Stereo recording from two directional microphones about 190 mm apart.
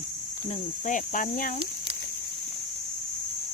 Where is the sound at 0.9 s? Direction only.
45° left (ahead or behind).